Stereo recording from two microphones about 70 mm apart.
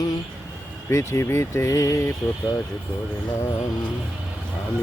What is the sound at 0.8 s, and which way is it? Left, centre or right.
Speech, left.